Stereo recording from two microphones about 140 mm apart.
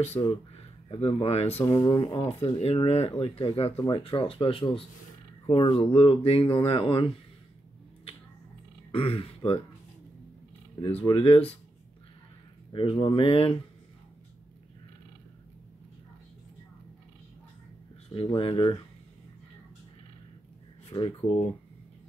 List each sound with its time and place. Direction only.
0.2 s speech: 20° left (ahead or behind)
0.8 s speech: 40° left (ahead or behind)
1.8 s speech: 35° left (ahead or behind)
8.9 s speech: 40° left (ahead or behind)
10.9 s speech: 40° left (ahead or behind)
12.7 s speech: 40° left (ahead or behind)
18.1 s speech: 40° left (ahead or behind)
20.9 s speech: 25° left (ahead or behind)